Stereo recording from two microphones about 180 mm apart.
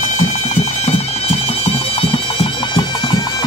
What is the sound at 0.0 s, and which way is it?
Music, 45° left (ahead or behind).